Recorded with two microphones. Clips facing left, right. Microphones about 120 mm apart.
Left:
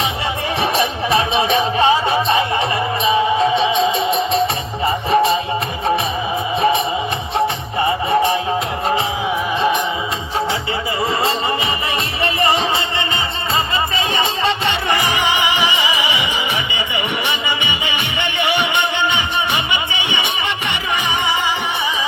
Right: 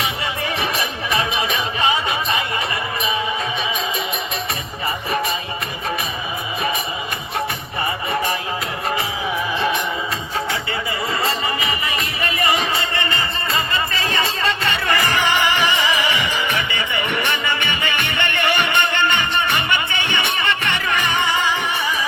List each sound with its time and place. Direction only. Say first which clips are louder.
0.6 s music: left 6 dB; 30° left (ahead or behind)
7.3 s music: left 6 dB; 25° left (ahead or behind)
12.2 s music: left 4 dB; 30° left (ahead or behind)